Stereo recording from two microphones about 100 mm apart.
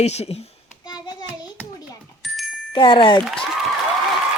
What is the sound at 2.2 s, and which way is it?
Music, centre (ahead or behind).